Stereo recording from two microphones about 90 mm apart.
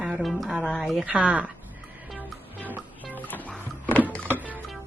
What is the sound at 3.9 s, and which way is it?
Music, 20° left (ahead or behind).